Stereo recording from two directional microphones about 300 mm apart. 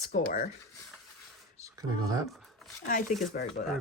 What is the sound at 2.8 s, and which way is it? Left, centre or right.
Speech, left.